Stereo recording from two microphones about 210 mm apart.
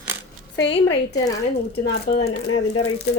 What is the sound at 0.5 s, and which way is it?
Speech, 55° left (ahead or behind).